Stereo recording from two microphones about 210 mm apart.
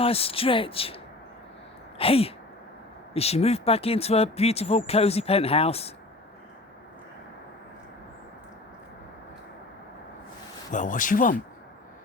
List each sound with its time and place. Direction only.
0.0 s speech: 25° left (ahead or behind)
10.7 s speech: 40° left (ahead or behind)